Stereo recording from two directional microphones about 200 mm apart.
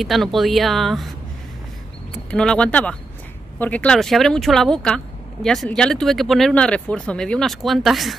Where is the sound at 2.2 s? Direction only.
5° left (ahead or behind).